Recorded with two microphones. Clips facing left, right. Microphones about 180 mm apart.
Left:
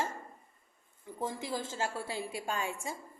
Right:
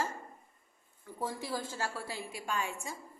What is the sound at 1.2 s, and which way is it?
A woman's voice, 20° left (ahead or behind).